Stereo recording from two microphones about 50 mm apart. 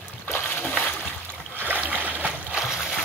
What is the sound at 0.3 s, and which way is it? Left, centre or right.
Splash, left.